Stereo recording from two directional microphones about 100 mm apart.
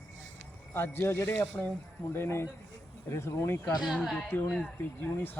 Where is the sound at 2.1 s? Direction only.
25° left (ahead or behind).